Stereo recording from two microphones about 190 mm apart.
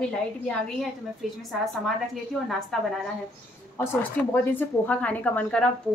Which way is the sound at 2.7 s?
Centre (ahead or behind).